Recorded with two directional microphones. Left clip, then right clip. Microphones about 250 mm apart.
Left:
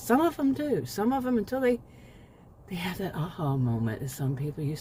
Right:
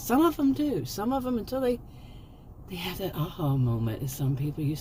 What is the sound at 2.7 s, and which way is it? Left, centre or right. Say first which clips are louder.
Speech: even; left.